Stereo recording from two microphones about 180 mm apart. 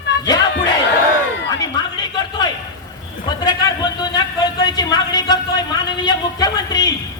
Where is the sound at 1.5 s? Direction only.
20° left (ahead or behind).